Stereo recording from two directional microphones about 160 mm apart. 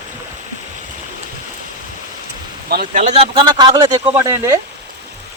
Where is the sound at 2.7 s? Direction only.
55° right (ahead or behind).